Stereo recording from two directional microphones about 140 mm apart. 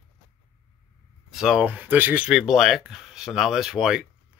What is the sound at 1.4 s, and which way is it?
Speech, 5° right (ahead or behind).